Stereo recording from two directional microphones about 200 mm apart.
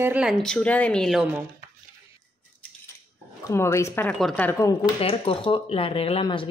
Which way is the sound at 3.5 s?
15° left (ahead or behind).